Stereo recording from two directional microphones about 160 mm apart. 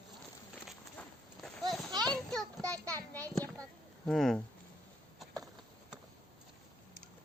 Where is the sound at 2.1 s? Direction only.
5° left (ahead or behind).